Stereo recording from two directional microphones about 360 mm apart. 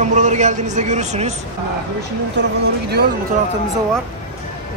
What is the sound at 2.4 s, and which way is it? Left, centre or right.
Speech, right.